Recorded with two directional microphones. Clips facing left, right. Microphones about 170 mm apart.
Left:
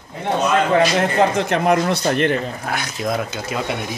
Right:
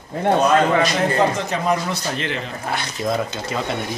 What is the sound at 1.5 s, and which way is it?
Speech, 60° left (ahead or behind).